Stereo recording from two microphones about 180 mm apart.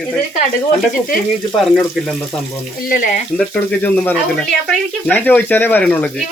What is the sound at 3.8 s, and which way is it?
Speech, 5° left (ahead or behind).